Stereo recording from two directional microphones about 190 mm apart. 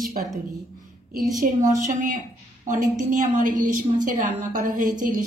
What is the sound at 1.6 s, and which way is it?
A woman's voice, 40° right (ahead or behind).